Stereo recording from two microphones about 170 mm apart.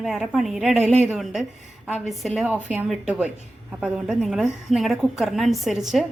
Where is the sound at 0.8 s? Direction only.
40° right (ahead or behind).